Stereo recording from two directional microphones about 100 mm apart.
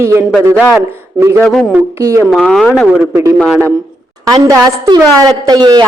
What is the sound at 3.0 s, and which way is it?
Speech, 25° right (ahead or behind).